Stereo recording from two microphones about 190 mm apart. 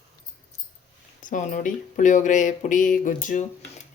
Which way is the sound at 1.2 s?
40° left (ahead or behind).